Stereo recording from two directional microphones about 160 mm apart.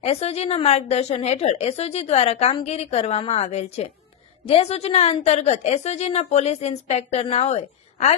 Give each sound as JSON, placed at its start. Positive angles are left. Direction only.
{"t": 0.0, "sound": "a woman's voice", "side_deg": 40}